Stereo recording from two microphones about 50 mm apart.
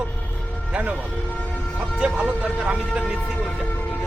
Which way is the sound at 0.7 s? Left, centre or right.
Right.